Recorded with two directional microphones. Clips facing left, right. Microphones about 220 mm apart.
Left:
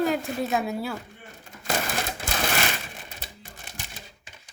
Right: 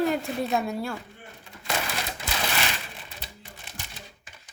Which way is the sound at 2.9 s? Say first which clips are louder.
Left 1 dB; 45° left (ahead or behind).